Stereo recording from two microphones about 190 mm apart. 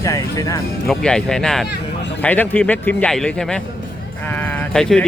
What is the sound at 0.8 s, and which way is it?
A man's voice, 5° left (ahead or behind).